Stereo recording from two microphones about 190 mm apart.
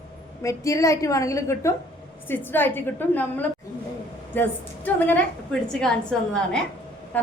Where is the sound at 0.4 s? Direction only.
15° left (ahead or behind).